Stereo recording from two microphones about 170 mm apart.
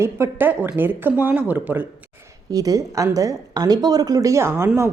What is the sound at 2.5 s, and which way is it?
A woman's voice, 20° right (ahead or behind).